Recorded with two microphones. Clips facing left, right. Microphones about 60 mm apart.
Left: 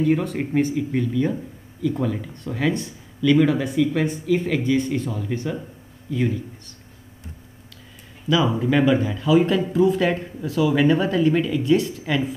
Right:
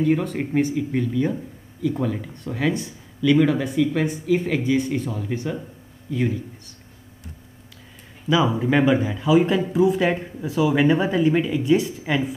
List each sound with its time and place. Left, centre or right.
0.0 s a man's voice: centre
8.3 s speech: right